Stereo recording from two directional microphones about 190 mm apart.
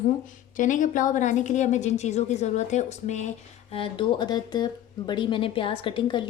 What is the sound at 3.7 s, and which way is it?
A woman's voice, 25° left (ahead or behind).